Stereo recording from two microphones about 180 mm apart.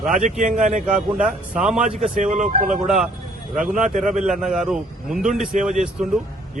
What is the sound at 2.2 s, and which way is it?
Speech, 40° right (ahead or behind).